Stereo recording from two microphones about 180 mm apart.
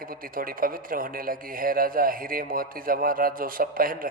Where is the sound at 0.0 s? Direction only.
50° right (ahead or behind).